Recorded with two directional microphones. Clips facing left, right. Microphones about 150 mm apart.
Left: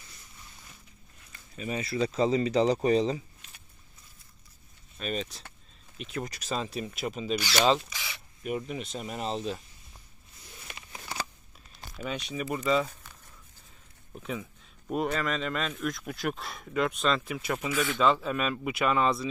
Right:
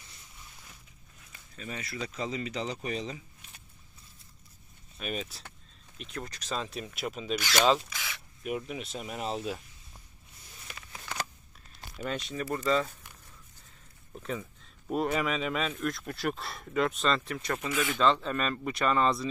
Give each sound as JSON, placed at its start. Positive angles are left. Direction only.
{"t": 1.8, "sound": "speech", "side_deg": 30}
{"t": 4.9, "sound": "speech", "side_deg": -5}
{"t": 10.9, "sound": "a sound", "side_deg": 10}
{"t": 12.0, "sound": "speech", "side_deg": 5}
{"t": 14.1, "sound": "speech", "side_deg": 5}